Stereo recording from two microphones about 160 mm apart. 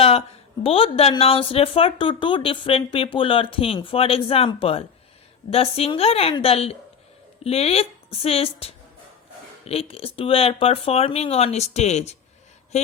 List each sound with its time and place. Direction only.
0.0 s speech: 40° left (ahead or behind)